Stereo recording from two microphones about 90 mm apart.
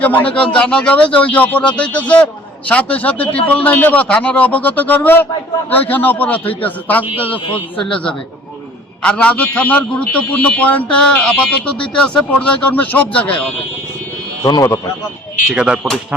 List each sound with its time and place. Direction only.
0.0 s a man's voice: 15° left (ahead or behind)
9.0 s speech: 10° left (ahead or behind)
14.4 s speech: 45° left (ahead or behind)
15.5 s speech: 10° right (ahead or behind)